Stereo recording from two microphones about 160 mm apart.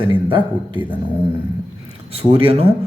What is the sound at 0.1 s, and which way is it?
Speech, 30° right (ahead or behind).